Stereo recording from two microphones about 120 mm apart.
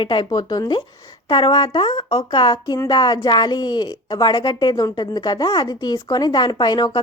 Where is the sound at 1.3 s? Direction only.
45° left (ahead or behind).